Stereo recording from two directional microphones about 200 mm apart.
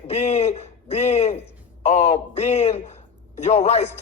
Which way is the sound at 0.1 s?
35° left (ahead or behind).